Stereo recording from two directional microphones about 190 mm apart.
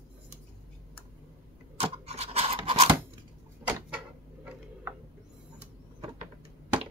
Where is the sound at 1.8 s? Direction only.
35° right (ahead or behind).